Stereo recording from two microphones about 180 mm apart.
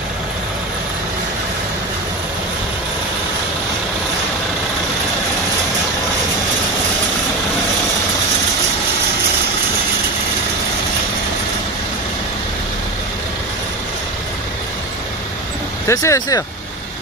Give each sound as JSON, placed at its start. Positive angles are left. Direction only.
{"t": 15.9, "sound": "speech", "side_deg": 15}